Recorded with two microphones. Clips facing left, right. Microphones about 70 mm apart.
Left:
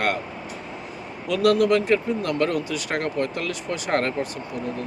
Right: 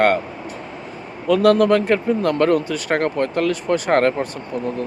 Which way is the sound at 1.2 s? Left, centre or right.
Right.